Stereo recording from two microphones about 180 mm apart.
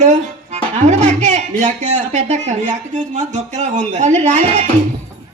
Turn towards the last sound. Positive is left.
turn(degrees=-40)  # may be behind; listen again after turning